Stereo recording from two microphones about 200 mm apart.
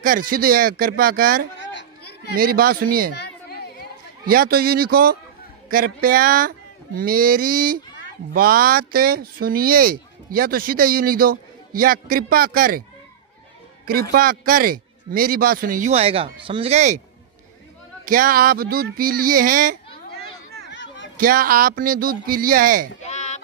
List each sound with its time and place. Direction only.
0.0 s speech: 45° right (ahead or behind)
1.6 s chatter: 65° left (ahead or behind)
2.3 s speech: 45° right (ahead or behind)
4.3 s speech: 50° right (ahead or behind)
14.1 s speech: 45° right (ahead or behind)
18.0 s speech: 45° right (ahead or behind)
20.7 s a sound: 65° left (ahead or behind)
21.2 s speech: 45° right (ahead or behind)
23.0 s a sound: 35° left (ahead or behind)